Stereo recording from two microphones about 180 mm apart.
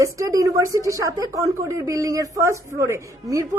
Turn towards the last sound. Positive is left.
turn(degrees=-15)  # may be behind; listen again after turning